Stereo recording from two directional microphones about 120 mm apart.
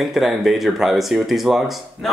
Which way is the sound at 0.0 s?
Centre (ahead or behind).